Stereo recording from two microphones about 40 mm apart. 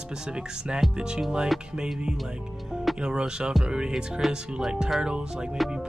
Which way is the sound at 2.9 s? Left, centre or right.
Right.